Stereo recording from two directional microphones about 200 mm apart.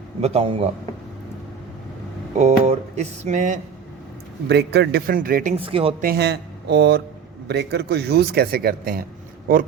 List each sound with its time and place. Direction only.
0.2 s speech: 30° right (ahead or behind)
2.4 s speech: 35° right (ahead or behind)
4.4 s speech: 60° right (ahead or behind)
5.5 s speech: 30° right (ahead or behind)
6.0 s speech: 50° right (ahead or behind)